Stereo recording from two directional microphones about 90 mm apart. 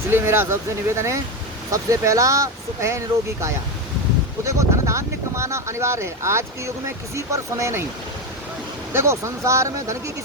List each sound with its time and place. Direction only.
0.1 s speech: 30° right (ahead or behind)
4.4 s speech: 35° right (ahead or behind)
8.9 s speech: 30° right (ahead or behind)